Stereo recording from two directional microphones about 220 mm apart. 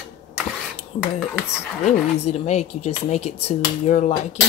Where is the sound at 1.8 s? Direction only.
30° left (ahead or behind).